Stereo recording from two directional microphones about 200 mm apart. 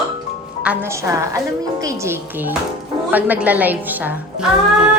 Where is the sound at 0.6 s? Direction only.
10° right (ahead or behind).